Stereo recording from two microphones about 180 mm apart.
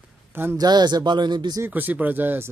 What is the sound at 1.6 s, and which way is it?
Speech, 10° right (ahead or behind).